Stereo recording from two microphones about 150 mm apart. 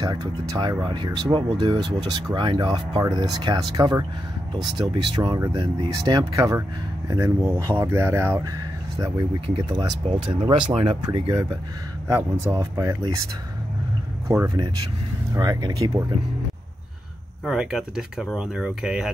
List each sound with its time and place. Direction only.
0.0 s speech: 25° right (ahead or behind)
9.7 s speech: 30° right (ahead or behind)
12.4 s speech: 25° right (ahead or behind)
14.2 s speech: 20° right (ahead or behind)
17.5 s speech: 5° right (ahead or behind)